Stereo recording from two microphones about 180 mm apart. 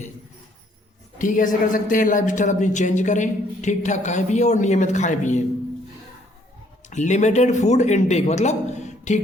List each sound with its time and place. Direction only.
1.2 s a woman's voice: 45° left (ahead or behind)
6.9 s a man's voice: 40° left (ahead or behind)